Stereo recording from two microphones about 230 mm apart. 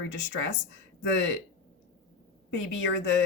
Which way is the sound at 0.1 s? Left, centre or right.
Left.